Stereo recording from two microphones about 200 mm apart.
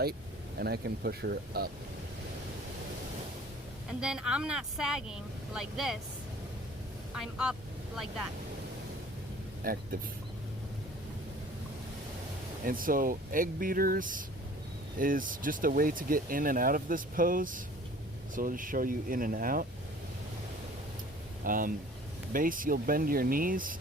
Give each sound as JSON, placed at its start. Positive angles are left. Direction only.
{"t": 0.6, "sound": "speech", "side_deg": -55}
{"t": 3.8, "sound": "speech", "side_deg": -5}
{"t": 7.1, "sound": "speech", "side_deg": -5}
{"t": 9.6, "sound": "speech", "side_deg": -45}
{"t": 12.6, "sound": "speech", "side_deg": -45}
{"t": 21.4, "sound": "speech", "side_deg": -45}